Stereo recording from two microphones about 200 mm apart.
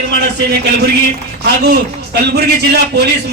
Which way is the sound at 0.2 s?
55° right (ahead or behind).